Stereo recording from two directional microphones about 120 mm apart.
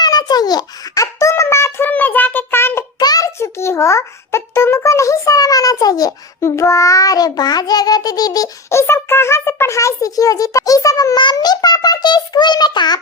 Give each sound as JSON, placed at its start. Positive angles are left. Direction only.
{"t": 0.0, "sound": "a sound", "side_deg": 35}
{"t": 3.0, "sound": "a child's voice", "side_deg": 30}
{"t": 8.8, "sound": "a child's voice", "side_deg": 20}